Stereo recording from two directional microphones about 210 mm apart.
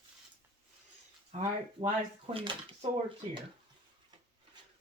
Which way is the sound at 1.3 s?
30° right (ahead or behind).